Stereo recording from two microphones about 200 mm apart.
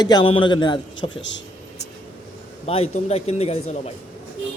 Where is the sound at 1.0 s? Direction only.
65° left (ahead or behind).